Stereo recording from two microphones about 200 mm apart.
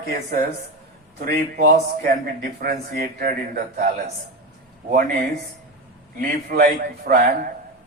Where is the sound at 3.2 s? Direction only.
50° right (ahead or behind).